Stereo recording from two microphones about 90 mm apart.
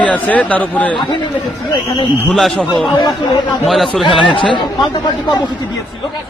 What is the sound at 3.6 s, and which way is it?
Speech, centre (ahead or behind).